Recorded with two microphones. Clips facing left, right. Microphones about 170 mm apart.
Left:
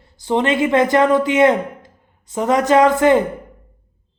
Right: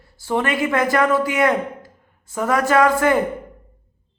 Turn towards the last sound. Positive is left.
turn(degrees=20)  # may be behind; listen again after turning